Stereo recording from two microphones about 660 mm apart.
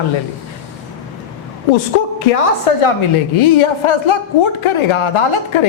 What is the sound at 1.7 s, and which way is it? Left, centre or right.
Speech, left.